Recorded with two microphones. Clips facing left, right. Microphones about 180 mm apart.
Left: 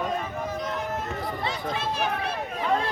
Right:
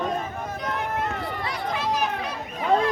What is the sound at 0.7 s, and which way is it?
Run, 65° right (ahead or behind).